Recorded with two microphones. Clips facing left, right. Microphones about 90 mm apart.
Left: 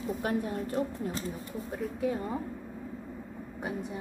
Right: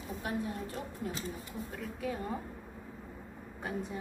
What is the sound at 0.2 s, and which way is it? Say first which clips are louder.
Speech: left 4 dB; 60° left (ahead or behind).